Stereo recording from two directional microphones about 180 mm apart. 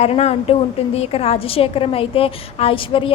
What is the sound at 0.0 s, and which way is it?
A woman's voice, 35° left (ahead or behind).